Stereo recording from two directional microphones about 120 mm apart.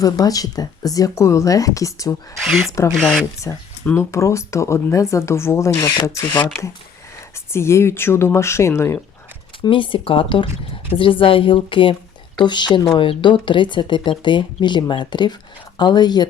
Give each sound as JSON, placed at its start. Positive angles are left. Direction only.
{"t": 0.0, "sound": "speech", "side_deg": 30}
{"t": 2.4, "sound": "speech", "side_deg": 0}
{"t": 3.5, "sound": "speech", "side_deg": 25}
{"t": 7.5, "sound": "speech", "side_deg": 20}
{"t": 9.6, "sound": "speech", "side_deg": 45}